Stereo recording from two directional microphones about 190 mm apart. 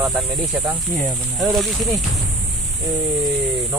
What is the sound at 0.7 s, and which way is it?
Speech, centre (ahead or behind).